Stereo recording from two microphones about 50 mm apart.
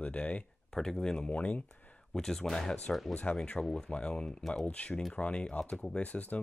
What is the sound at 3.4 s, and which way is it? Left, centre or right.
Speech, centre.